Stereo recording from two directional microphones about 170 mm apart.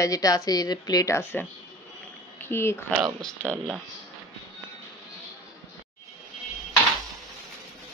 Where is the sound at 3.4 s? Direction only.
10° right (ahead or behind).